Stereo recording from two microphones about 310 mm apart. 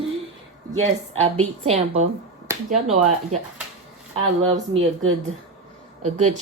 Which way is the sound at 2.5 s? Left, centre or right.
Centre.